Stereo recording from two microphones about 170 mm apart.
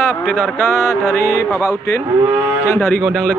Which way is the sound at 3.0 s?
Centre (ahead or behind).